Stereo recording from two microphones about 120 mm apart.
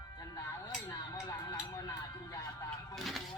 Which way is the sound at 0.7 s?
25° left (ahead or behind).